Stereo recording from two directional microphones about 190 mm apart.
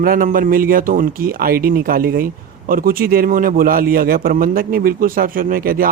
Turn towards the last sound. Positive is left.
turn(degrees=-50)  # may be behind; listen again after turning